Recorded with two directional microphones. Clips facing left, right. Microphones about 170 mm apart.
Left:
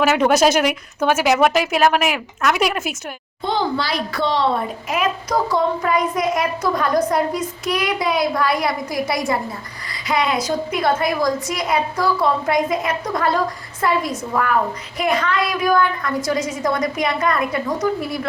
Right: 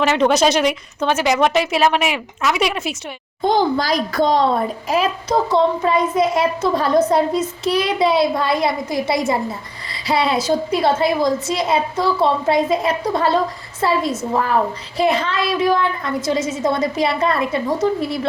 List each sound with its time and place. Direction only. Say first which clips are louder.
0.0 s speech: even; 5° left (ahead or behind)
3.4 s a child's voice: right 4 dB; 45° right (ahead or behind); by 18.3 s 25° right (ahead or behind)